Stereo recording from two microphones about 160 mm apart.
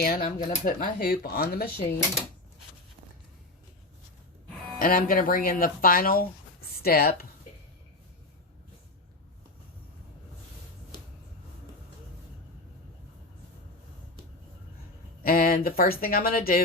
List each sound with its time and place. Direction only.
0.0 s speech: 70° left (ahead or behind)
0.3 s speech: 60° left (ahead or behind)
4.8 s speech: 60° left (ahead or behind)
15.2 s speech: 65° left (ahead or behind)